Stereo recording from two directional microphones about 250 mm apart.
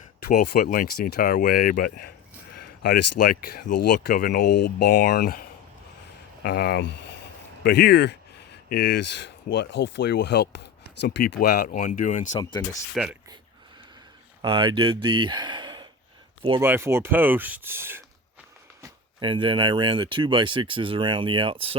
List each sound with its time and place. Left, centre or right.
0.2 s speech: left
2.6 s a sound: left
3.4 s speech: left
4.4 s speech: left
4.9 s speech: left
6.4 s speech: left
12.3 s speech: centre
13.0 s speech: centre
14.4 s speech: centre
18.8 s speech: centre